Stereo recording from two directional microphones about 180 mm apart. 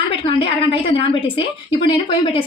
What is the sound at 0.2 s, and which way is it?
A woman's voice, 30° left (ahead or behind).